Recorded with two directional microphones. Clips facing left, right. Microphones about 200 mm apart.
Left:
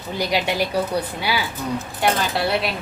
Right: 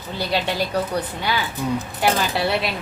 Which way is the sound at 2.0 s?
Centre (ahead or behind).